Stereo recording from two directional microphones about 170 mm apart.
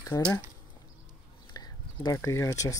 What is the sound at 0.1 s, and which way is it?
Speech, 25° left (ahead or behind).